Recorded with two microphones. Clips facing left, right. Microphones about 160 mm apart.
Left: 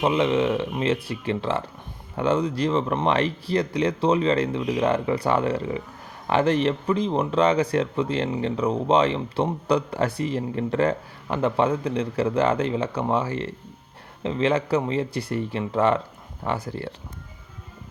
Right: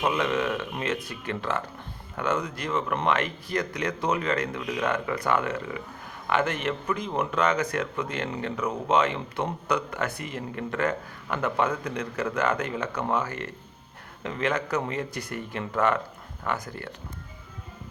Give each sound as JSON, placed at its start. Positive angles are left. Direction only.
{"t": 0.0, "sound": "speech", "side_deg": 25}